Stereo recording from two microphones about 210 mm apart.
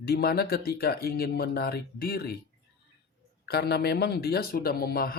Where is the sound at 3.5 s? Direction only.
50° left (ahead or behind).